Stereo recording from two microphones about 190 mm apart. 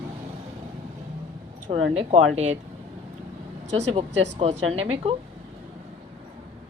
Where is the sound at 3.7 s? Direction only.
35° right (ahead or behind).